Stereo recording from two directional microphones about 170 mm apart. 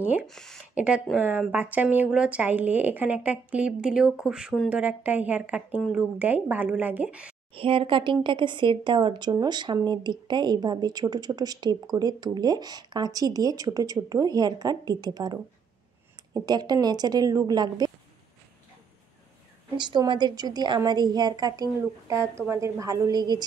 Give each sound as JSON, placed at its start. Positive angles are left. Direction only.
{"t": 0.0, "sound": "speech", "side_deg": -10}
{"t": 0.3, "sound": "speech", "side_deg": 5}
{"t": 7.5, "sound": "speech", "side_deg": -30}
{"t": 16.4, "sound": "speech", "side_deg": -25}
{"t": 19.8, "sound": "speech", "side_deg": -25}